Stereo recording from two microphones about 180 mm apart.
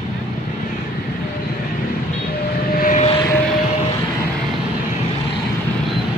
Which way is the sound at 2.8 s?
40° left (ahead or behind).